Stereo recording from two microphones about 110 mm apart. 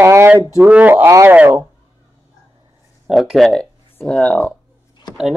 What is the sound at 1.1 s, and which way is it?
Speech, 30° right (ahead or behind).